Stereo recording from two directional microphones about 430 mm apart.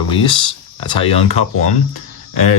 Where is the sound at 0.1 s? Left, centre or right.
Centre.